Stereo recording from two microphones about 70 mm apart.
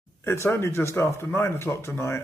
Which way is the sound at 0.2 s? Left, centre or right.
Left.